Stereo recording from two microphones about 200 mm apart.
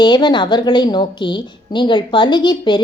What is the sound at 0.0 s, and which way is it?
A woman's voice, 20° left (ahead or behind).